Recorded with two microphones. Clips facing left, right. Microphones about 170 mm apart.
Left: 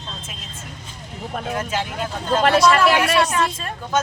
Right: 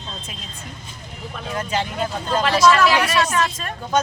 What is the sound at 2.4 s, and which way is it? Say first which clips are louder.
Speech: left 4 dB; 55° left (ahead or behind).